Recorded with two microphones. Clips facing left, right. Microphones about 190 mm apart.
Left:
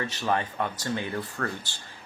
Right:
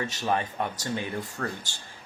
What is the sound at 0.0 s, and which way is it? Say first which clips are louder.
Speech: even; 15° right (ahead or behind).